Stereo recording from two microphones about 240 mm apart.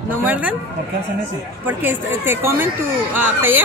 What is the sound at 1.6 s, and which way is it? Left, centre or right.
Speech, centre.